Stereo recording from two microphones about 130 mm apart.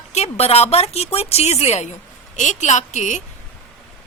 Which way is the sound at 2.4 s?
70° left (ahead or behind).